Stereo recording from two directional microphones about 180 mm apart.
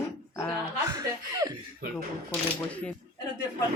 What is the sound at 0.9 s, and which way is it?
Speech, 20° right (ahead or behind).